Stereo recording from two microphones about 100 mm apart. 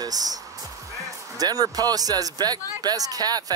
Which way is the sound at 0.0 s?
40° right (ahead or behind).